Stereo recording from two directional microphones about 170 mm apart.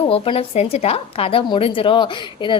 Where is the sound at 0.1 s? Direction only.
35° left (ahead or behind).